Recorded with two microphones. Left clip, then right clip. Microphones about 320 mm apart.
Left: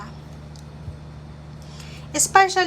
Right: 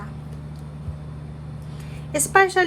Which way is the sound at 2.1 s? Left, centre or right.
Centre.